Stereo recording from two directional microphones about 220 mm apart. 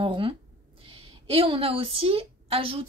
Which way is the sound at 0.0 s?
25° right (ahead or behind).